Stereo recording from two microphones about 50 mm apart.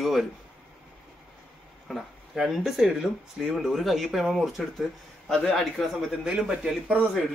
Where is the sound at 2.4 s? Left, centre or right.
Centre.